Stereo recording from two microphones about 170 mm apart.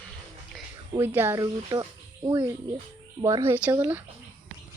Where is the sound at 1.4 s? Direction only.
25° right (ahead or behind).